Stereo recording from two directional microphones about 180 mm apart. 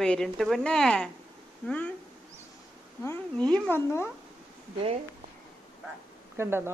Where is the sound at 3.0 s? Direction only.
10° left (ahead or behind).